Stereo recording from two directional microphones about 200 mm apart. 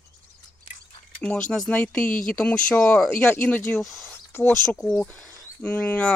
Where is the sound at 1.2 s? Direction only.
5° left (ahead or behind).